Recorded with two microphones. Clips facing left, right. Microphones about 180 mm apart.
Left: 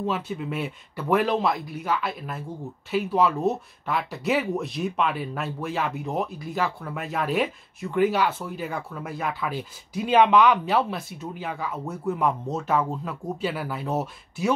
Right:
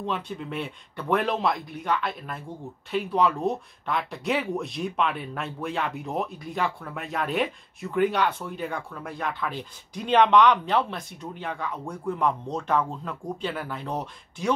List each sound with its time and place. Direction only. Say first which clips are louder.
0.0 s speech: left 3 dB; 5° left (ahead or behind)